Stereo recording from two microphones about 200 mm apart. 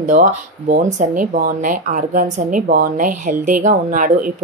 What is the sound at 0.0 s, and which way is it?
A woman's voice, 40° right (ahead or behind).